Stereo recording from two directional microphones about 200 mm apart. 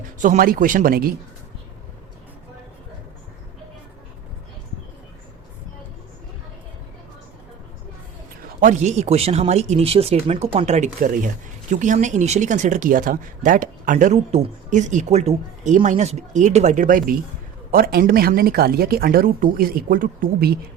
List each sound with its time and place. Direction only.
0.2 s a woman's voice: 40° right (ahead or behind)
8.6 s a woman's voice: 35° right (ahead or behind)